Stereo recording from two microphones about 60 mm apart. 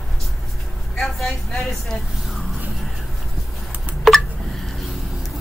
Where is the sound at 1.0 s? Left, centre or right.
Centre.